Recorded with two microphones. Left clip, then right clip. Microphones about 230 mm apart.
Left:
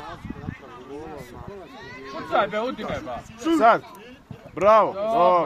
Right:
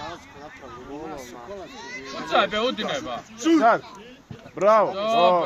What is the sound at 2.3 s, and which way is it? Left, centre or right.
Speech, right.